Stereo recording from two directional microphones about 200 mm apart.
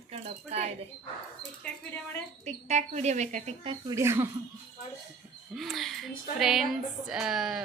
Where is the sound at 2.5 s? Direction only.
35° right (ahead or behind).